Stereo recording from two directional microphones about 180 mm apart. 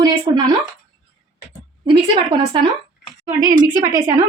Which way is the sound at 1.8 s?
25° right (ahead or behind).